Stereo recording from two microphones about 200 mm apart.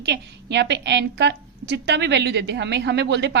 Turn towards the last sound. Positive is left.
turn(degrees=-60)  # may be behind; listen again after turning